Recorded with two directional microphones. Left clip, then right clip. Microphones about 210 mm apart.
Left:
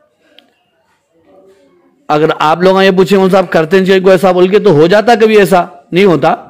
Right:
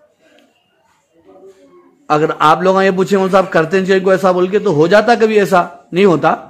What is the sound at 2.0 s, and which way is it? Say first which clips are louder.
A man's voice: left 2 dB; 40° left (ahead or behind).